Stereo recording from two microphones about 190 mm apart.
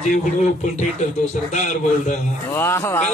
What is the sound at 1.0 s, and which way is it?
Speech, 40° left (ahead or behind).